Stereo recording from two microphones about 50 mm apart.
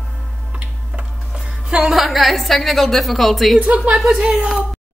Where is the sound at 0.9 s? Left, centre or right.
Centre.